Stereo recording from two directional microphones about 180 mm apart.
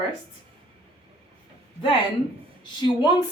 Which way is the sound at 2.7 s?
25° left (ahead or behind).